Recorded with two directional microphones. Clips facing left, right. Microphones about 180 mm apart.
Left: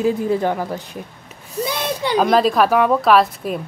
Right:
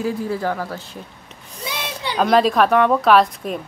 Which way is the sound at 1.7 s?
50° left (ahead or behind).